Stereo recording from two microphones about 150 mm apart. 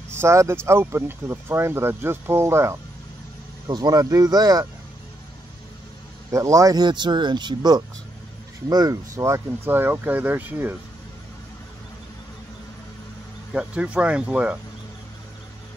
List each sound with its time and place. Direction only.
0.1 s speech: 20° right (ahead or behind)
6.3 s speech: 20° right (ahead or behind)
13.5 s speech: 10° right (ahead or behind)